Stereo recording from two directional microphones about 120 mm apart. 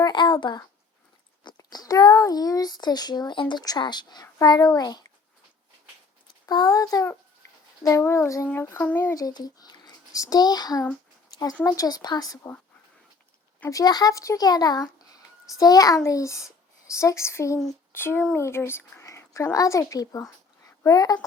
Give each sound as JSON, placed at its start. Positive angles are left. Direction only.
{"t": 0.0, "sound": "a child's voice", "side_deg": 40}
{"t": 6.4, "sound": "a child's voice", "side_deg": 35}
{"t": 9.1, "sound": "a child's voice", "side_deg": 30}
{"t": 13.7, "sound": "speech", "side_deg": 30}